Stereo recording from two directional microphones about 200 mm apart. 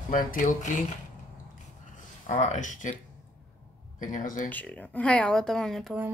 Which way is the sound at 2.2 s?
35° left (ahead or behind).